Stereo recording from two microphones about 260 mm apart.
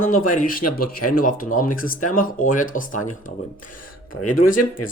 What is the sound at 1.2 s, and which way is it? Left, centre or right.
Speech, left.